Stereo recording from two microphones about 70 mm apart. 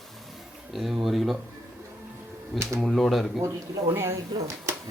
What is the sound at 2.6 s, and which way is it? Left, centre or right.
Speech, right.